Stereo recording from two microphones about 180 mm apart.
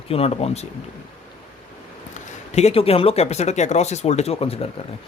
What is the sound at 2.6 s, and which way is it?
Speech, 35° left (ahead or behind).